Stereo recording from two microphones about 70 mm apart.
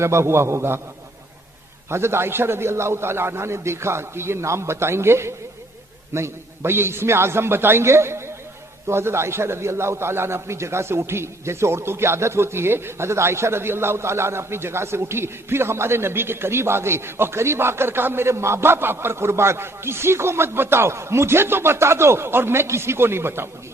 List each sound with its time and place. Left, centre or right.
0.0 s a man's voice: right
1.9 s a man's voice: right